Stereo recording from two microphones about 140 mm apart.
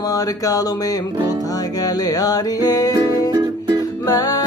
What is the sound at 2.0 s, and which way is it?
Music, 25° left (ahead or behind).